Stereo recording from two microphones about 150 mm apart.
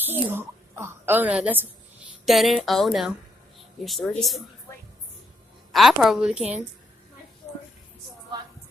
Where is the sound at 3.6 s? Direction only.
Centre (ahead or behind).